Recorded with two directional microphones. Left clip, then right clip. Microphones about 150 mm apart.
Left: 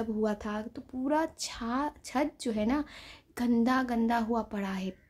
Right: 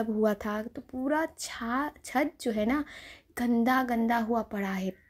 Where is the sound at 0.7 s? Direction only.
10° right (ahead or behind).